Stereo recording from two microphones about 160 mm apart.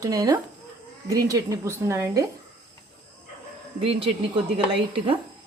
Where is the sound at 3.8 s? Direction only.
35° right (ahead or behind).